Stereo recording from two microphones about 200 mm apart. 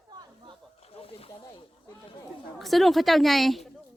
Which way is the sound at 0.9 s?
30° left (ahead or behind).